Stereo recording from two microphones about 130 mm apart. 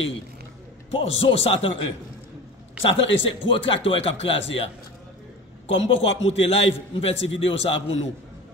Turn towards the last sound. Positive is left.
turn(degrees=45)  # may be behind; listen again after turning